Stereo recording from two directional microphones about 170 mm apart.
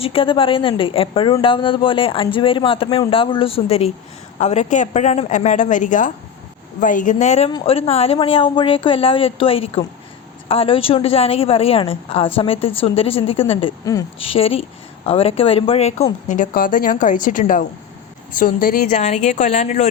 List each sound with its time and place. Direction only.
0.0 s a woman's voice: 30° left (ahead or behind); by 18.9 s 60° left (ahead or behind)
18.9 s a woman's voice: 40° left (ahead or behind)